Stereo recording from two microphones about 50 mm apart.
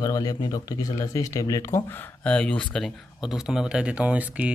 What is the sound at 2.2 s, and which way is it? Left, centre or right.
Speech, left.